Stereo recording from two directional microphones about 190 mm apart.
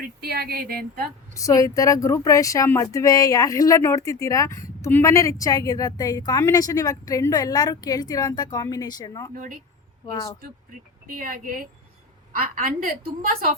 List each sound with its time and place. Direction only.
0.2 s speech: 55° right (ahead or behind)
1.4 s speech: 15° left (ahead or behind)
9.3 s a woman's voice: 45° right (ahead or behind)
10.1 s speech: 25° left (ahead or behind)
11.1 s a woman's voice: 45° right (ahead or behind)